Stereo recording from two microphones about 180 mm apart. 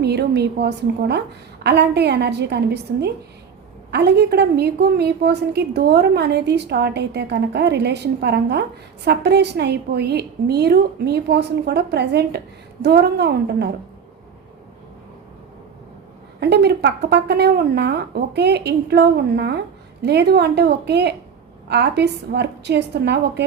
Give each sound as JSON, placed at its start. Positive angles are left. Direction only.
{"t": 0.0, "sound": "a woman's voice", "side_deg": -65}
{"t": 16.4, "sound": "speech", "side_deg": -70}